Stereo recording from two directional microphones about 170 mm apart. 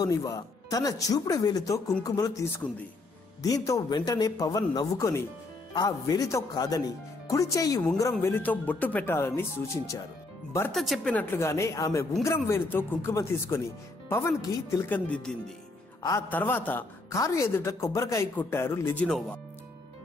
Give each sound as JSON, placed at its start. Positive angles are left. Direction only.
{"t": 0.0, "sound": "a woman's voice", "side_deg": 20}
{"t": 10.7, "sound": "a woman's voice", "side_deg": 0}
{"t": 15.0, "sound": "a woman's voice", "side_deg": 5}